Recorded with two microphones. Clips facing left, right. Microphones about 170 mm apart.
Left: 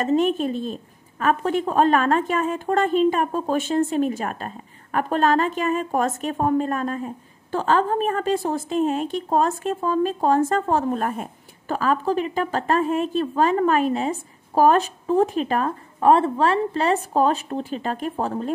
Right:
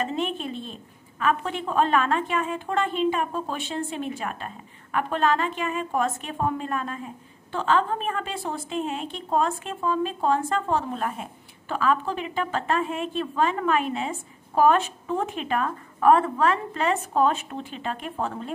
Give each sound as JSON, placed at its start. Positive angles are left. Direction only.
{"t": 0.0, "sound": "a woman's voice", "side_deg": 45}